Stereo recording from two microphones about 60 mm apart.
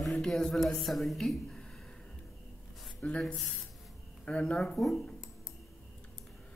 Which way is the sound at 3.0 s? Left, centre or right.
Left.